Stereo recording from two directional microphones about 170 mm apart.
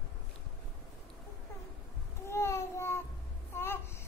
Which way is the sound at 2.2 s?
15° left (ahead or behind).